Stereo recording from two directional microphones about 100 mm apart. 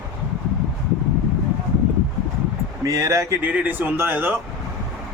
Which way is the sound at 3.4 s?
15° right (ahead or behind).